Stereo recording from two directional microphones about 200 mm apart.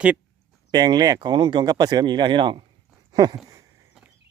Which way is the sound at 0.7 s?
20° right (ahead or behind).